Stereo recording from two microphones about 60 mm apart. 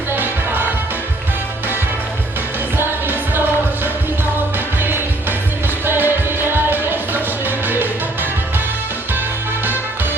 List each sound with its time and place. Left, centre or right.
2.7 s music: right
5.8 s music: right